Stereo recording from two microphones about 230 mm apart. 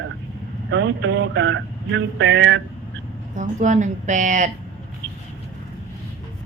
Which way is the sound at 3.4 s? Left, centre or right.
Right.